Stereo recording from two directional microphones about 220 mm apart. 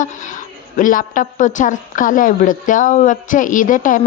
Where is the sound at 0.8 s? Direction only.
35° left (ahead or behind).